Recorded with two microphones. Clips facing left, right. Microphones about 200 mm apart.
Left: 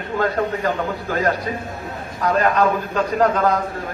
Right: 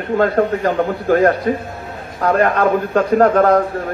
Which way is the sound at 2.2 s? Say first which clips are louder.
Right 3 dB; 55° right (ahead or behind).